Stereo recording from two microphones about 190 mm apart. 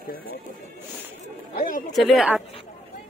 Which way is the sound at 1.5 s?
45° left (ahead or behind).